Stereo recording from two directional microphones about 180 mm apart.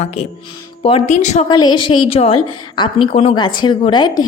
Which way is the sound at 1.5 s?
25° left (ahead or behind).